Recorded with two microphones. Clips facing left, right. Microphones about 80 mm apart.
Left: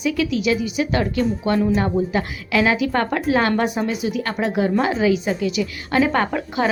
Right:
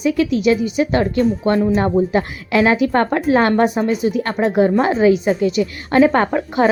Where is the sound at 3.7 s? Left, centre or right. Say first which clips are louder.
Right 5 dB; centre.